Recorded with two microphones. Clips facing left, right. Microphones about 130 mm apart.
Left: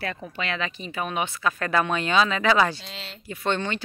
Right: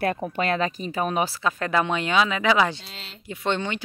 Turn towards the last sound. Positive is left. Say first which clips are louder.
# even
turn(degrees=-15)  # may be behind; listen again after turning